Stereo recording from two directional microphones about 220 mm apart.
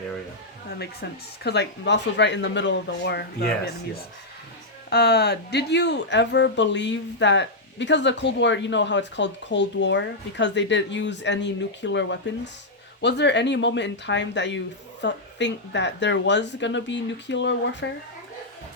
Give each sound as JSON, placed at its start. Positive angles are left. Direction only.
{"t": 1.0, "sound": "speech", "side_deg": 45}
{"t": 4.9, "sound": "speech", "side_deg": 45}